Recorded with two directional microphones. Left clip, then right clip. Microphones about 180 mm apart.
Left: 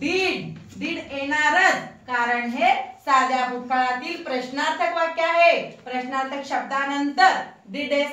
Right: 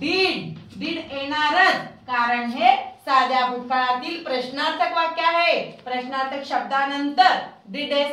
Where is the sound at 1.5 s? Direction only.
Centre (ahead or behind).